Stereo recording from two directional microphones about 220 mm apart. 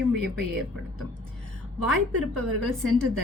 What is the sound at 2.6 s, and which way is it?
Speech, centre (ahead or behind).